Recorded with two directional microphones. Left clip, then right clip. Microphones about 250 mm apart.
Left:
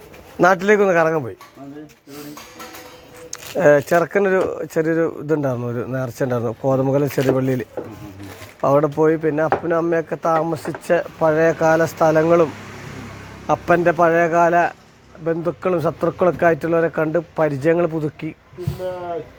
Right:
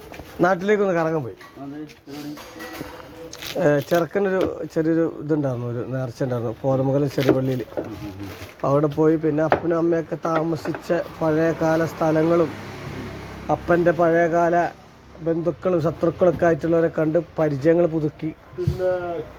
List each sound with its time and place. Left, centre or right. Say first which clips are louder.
0.3 s speech: left 5 dB; left
3.3 s speech: left 6 dB; left
8.6 s speech: left 4 dB; left
13.5 s speech: left 3 dB; left